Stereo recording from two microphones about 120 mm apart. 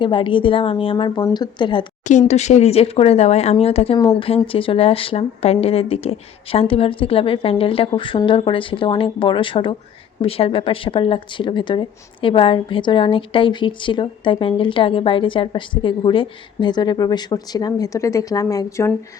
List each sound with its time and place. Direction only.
0.0 s speech: 45° left (ahead or behind)
2.0 s speech: 80° left; by 3.9 s 55° left (ahead or behind)
3.9 s speech: 45° left (ahead or behind); by 18.9 s 25° left (ahead or behind)